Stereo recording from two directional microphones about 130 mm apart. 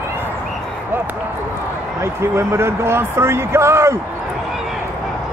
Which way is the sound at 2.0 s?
20° right (ahead or behind).